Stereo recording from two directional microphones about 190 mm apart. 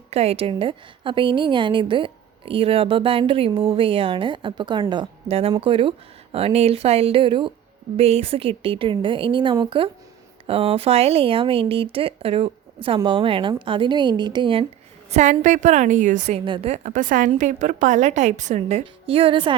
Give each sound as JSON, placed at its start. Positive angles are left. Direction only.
{"t": 0.1, "sound": "a woman's voice", "side_deg": -35}
{"t": 15.1, "sound": "a woman's voice", "side_deg": -40}
{"t": 16.4, "sound": "a woman's voice", "side_deg": -30}